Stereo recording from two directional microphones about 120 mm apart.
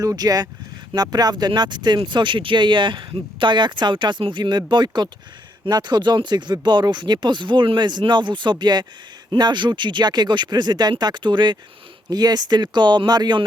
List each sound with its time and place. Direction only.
0.0 s speech: 30° right (ahead or behind)